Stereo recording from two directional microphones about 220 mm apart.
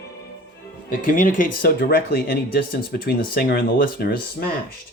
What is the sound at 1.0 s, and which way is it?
Speech, 40° left (ahead or behind).